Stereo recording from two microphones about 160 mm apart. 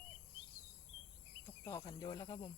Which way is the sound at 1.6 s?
25° left (ahead or behind).